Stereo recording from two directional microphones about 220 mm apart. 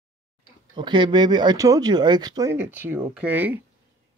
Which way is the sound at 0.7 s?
20° right (ahead or behind).